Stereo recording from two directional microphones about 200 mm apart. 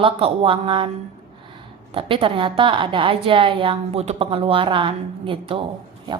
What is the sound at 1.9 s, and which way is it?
A woman's voice, 25° right (ahead or behind).